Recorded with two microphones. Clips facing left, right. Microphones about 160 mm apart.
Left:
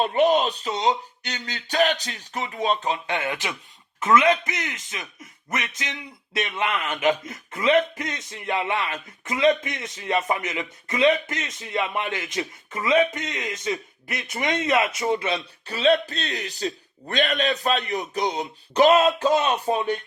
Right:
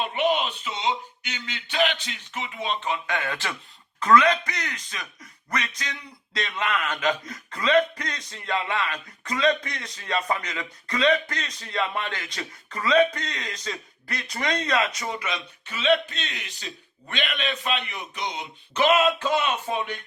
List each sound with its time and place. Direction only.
0.0 s speech: 40° left (ahead or behind)
3.2 s speech: 15° left (ahead or behind); by 20.0 s 40° left (ahead or behind)